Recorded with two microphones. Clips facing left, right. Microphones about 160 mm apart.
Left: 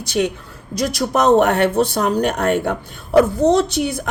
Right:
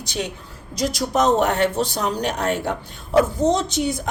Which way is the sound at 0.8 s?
60° left (ahead or behind).